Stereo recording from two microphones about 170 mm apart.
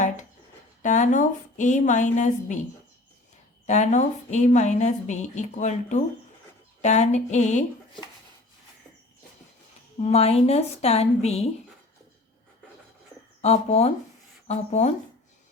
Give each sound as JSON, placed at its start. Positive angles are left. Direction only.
{"t": 0.8, "sound": "a woman's voice", "side_deg": 45}
{"t": 3.7, "sound": "a woman's voice", "side_deg": 45}
{"t": 10.0, "sound": "a woman's voice", "side_deg": 40}
{"t": 13.4, "sound": "a woman's voice", "side_deg": 40}